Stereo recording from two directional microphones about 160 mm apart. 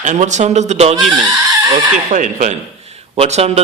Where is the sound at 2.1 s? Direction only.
50° right (ahead or behind).